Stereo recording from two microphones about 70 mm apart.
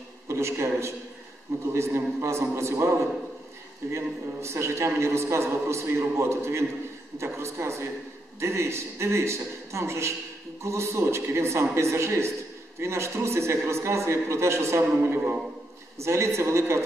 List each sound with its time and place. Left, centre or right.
0.3 s a man's voice: right